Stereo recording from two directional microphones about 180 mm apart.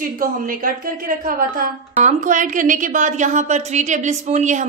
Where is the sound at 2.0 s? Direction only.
45° right (ahead or behind).